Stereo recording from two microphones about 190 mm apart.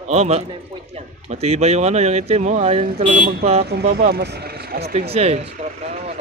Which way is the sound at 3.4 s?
35° right (ahead or behind).